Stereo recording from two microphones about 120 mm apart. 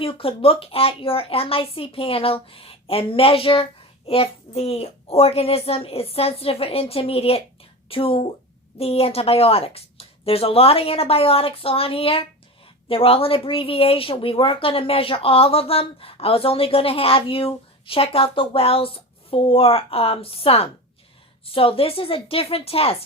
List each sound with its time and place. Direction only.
0.0 s a child's voice: 50° left (ahead or behind)